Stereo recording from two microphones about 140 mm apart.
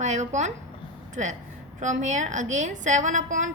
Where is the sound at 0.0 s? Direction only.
55° right (ahead or behind).